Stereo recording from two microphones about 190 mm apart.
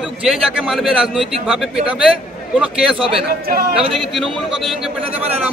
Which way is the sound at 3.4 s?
50° right (ahead or behind).